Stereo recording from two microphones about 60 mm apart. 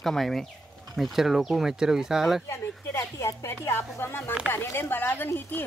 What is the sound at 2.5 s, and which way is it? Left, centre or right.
A woman's voice, left.